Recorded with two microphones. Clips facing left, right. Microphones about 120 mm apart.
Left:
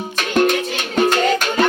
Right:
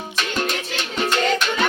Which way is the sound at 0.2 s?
50° left (ahead or behind).